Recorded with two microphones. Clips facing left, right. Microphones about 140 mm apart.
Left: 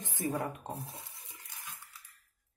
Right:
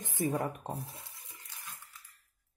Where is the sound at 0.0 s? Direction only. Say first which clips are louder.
Right 2 dB; 15° right (ahead or behind).